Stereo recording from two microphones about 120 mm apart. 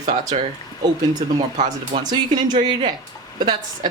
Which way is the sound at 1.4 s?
80° right.